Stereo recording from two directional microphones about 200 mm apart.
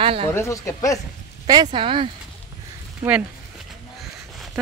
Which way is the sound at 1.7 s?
25° right (ahead or behind).